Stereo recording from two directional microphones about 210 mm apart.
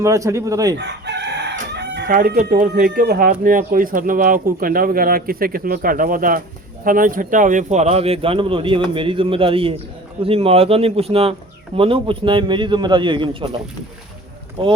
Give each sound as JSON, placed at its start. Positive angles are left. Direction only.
{"t": 0.0, "sound": "speech", "side_deg": -15}
{"t": 0.8, "sound": "chicken", "side_deg": -55}
{"t": 2.4, "sound": "speech", "side_deg": -40}